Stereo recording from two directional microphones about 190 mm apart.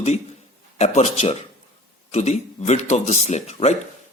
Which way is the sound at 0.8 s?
35° left (ahead or behind).